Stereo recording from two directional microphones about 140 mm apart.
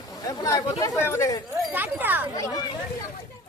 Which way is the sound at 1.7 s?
15° right (ahead or behind).